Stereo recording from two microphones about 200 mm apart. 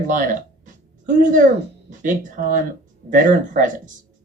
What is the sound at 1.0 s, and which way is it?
Speech, 40° right (ahead or behind).